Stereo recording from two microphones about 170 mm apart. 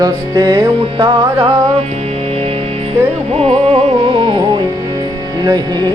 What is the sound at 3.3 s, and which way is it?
Music, 35° right (ahead or behind).